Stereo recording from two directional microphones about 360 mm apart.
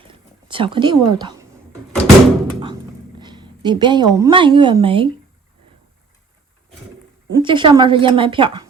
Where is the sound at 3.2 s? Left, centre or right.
Centre.